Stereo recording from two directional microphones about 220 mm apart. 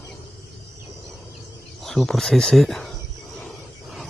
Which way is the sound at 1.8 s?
Centre (ahead or behind).